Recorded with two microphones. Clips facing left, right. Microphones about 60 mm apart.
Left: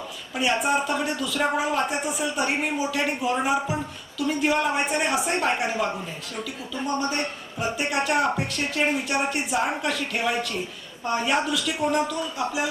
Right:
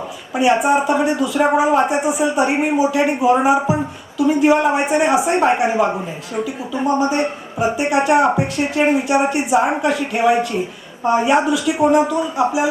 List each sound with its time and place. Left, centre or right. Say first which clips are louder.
0.3 s speech: right 9 dB; centre